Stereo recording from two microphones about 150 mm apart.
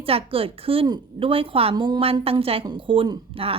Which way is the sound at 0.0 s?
40° right (ahead or behind).